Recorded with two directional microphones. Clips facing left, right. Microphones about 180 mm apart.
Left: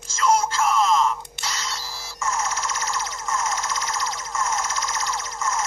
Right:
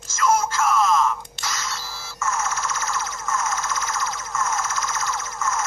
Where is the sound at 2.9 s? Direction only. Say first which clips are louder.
Right 1 dB; 30° left (ahead or behind).